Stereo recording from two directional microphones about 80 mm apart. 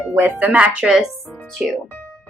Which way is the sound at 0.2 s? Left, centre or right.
Right.